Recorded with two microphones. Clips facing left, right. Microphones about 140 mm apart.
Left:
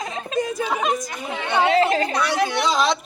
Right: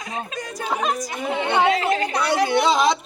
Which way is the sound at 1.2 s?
20° right (ahead or behind).